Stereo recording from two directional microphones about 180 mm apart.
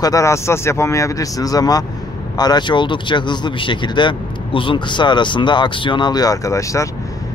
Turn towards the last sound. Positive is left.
turn(degrees=15)  # may be behind; listen again after turning